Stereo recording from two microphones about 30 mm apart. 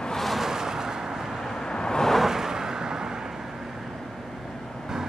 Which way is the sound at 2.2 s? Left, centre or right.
Centre.